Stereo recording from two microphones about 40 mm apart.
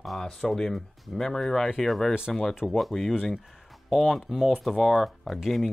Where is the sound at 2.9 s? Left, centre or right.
Centre.